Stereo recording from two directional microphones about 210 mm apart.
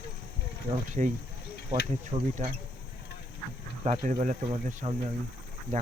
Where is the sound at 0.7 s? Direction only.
25° right (ahead or behind).